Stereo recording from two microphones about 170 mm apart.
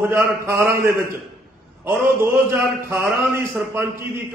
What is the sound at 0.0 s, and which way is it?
A man's voice, 15° right (ahead or behind).